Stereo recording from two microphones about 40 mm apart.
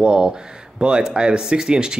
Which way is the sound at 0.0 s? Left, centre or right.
Right.